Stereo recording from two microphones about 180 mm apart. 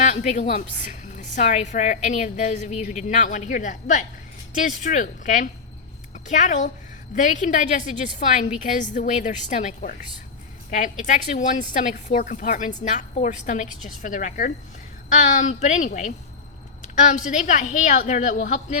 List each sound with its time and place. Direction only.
0.0 s a woman's voice: 45° left (ahead or behind)